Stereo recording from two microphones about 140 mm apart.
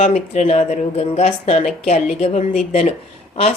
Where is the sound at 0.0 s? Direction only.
50° left (ahead or behind).